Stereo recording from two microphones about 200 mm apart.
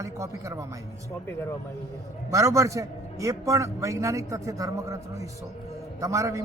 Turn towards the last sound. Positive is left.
turn(degrees=-15)  # may be behind; listen again after turning